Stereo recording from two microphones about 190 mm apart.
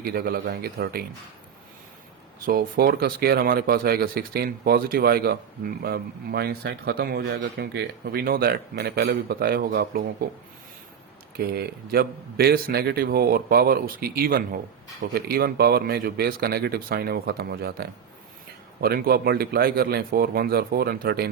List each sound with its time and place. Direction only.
0.0 s speech: 55° right (ahead or behind)
2.5 s speech: 55° right (ahead or behind)
11.3 s speech: 55° right (ahead or behind)